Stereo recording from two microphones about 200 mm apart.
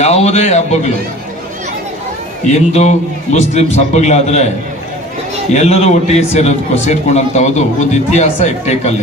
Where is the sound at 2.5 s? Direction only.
35° left (ahead or behind).